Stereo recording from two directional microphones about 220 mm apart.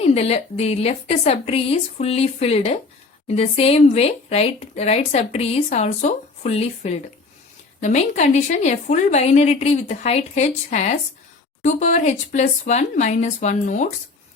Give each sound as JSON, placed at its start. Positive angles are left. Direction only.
{"t": 0.0, "sound": "a woman's voice", "side_deg": 30}